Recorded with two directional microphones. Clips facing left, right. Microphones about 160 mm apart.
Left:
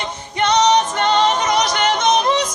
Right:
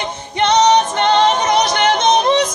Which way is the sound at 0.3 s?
25° right (ahead or behind).